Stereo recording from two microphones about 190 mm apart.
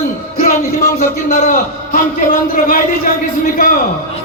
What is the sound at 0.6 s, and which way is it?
A man's voice, 45° left (ahead or behind).